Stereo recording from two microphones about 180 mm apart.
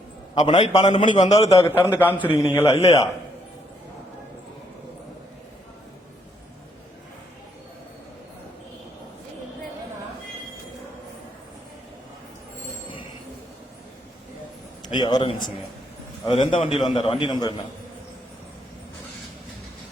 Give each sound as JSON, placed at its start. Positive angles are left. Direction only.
{"t": 0.4, "sound": "a man's voice", "side_deg": 30}
{"t": 1.5, "sound": "a man's voice", "side_deg": 15}
{"t": 2.6, "sound": "a man's voice", "side_deg": 35}
{"t": 14.8, "sound": "a man's voice", "side_deg": 25}